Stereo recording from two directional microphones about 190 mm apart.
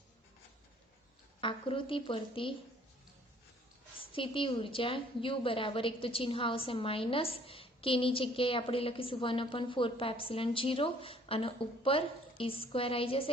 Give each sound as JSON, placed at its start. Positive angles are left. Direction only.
{"t": 1.4, "sound": "a woman's voice", "side_deg": 25}
{"t": 4.1, "sound": "a woman's voice", "side_deg": 25}